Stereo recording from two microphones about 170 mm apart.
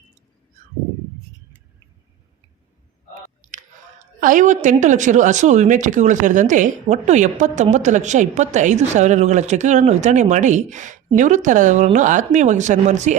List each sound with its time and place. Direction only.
3.5 s a woman's voice: 50° right (ahead or behind)